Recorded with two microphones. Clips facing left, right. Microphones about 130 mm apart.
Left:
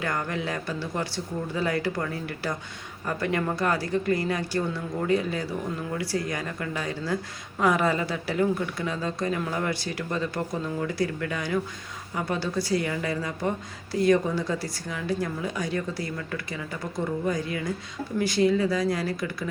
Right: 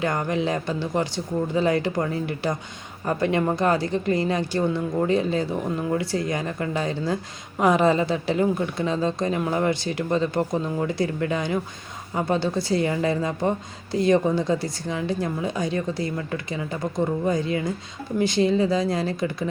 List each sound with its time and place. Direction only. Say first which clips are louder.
0.0 s a woman's voice: right 5 dB; 20° right (ahead or behind)